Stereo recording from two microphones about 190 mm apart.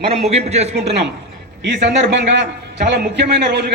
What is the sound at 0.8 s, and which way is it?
A man's voice, 60° right (ahead or behind).